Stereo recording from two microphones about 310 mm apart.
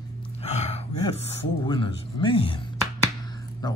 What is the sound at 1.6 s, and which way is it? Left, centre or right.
Speech, centre.